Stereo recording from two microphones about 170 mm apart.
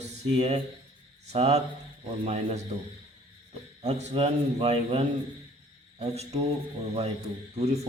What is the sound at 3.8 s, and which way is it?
A man's voice, 40° right (ahead or behind).